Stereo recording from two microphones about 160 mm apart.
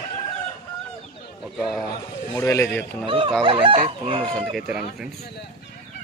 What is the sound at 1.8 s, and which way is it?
A man's voice, 15° left (ahead or behind).